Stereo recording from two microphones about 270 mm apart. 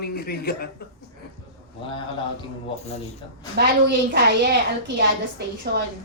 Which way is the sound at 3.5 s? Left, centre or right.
Right.